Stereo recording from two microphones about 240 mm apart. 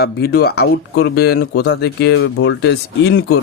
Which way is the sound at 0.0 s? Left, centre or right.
Left.